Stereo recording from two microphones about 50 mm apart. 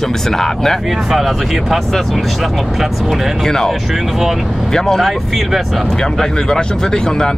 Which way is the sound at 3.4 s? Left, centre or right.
Centre.